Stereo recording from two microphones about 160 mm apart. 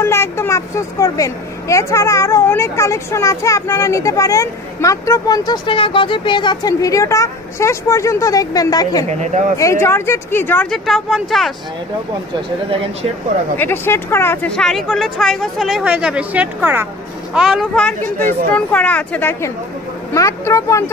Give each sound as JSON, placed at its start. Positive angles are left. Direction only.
{"t": 0.0, "sound": "a woman's voice", "side_deg": 15}
{"t": 13.6, "sound": "a woman's voice", "side_deg": 15}